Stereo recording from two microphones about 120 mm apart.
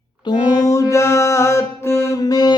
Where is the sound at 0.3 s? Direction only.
40° left (ahead or behind).